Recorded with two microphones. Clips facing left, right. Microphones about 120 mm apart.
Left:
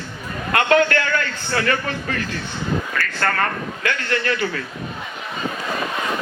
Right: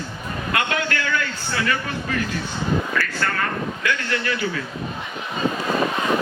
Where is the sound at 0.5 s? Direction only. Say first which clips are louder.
Left 8 dB; 55° left (ahead or behind).